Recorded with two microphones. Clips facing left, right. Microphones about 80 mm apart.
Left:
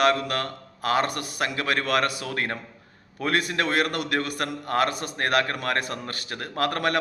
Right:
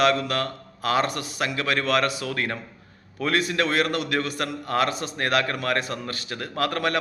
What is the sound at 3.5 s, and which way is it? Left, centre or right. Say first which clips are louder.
A man's voice: right 1 dB; left.